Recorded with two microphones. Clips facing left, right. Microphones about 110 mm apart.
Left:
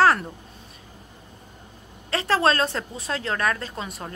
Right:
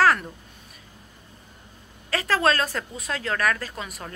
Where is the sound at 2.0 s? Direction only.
30° left (ahead or behind).